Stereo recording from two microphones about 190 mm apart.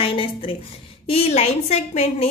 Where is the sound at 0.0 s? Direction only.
30° left (ahead or behind).